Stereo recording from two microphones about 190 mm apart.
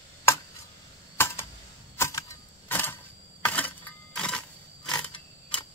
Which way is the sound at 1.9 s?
15° left (ahead or behind).